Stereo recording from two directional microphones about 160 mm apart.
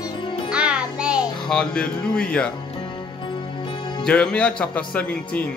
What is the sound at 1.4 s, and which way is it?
Speech, 5° left (ahead or behind).